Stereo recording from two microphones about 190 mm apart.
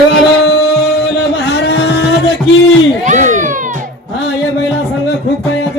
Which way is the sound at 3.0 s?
40° right (ahead or behind).